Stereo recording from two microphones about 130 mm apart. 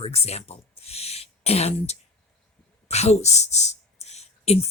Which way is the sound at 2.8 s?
55° left (ahead or behind).